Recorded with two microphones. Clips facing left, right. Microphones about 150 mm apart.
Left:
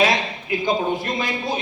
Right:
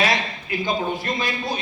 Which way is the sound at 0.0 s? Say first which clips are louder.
Left 3 dB; 20° left (ahead or behind).